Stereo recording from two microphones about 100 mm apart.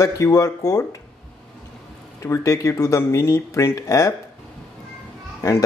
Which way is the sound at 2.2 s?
30° left (ahead or behind).